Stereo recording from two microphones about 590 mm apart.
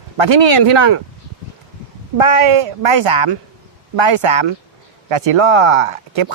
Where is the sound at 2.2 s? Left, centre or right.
Right.